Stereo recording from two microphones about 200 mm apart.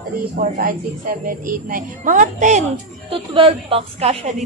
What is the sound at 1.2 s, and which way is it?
A woman's voice, 40° right (ahead or behind).